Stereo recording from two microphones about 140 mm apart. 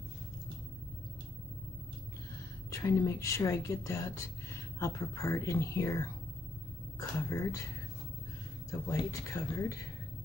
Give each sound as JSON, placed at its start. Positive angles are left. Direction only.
{"t": 2.7, "sound": "speech", "side_deg": 25}
{"t": 8.6, "sound": "speech", "side_deg": 20}